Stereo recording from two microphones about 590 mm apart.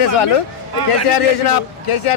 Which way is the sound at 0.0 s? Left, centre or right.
Left.